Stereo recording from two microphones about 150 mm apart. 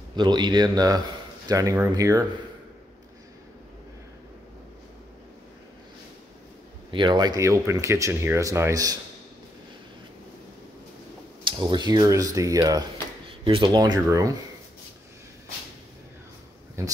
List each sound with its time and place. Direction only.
0.1 s speech: 30° right (ahead or behind)
6.9 s speech: 30° right (ahead or behind)
11.4 s speech: 30° right (ahead or behind)
13.4 s speech: 35° right (ahead or behind)
16.8 s speech: 20° right (ahead or behind)